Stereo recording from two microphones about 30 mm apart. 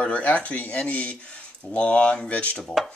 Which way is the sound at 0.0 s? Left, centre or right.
Left.